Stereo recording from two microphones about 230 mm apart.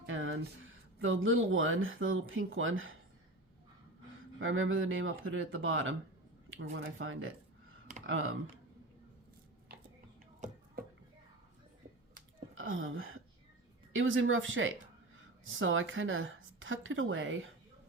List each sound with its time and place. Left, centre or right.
0.0 s music: right
1.0 s a woman's voice: right
4.4 s a woman's voice: right
12.5 s a sound: right
13.9 s a woman's voice: right